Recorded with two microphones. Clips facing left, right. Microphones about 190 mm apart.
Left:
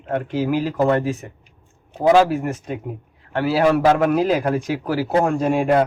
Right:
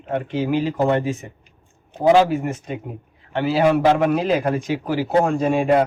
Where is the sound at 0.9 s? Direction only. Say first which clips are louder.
Left 2 dB; 20° right (ahead or behind).